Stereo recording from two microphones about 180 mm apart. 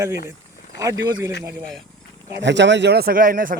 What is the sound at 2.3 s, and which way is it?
Speech, 75° right (ahead or behind).